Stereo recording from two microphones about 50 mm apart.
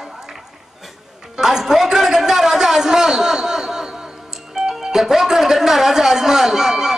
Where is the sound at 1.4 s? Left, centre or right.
Centre.